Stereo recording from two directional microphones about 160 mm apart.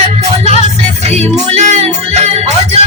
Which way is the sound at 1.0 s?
40° right (ahead or behind).